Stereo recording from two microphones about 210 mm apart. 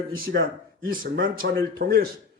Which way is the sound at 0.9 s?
40° right (ahead or behind).